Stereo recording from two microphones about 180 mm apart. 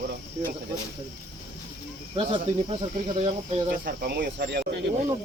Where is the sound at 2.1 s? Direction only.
30° right (ahead or behind).